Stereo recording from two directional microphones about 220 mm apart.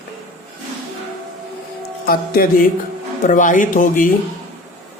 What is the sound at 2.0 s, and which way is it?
Speech, 40° left (ahead or behind).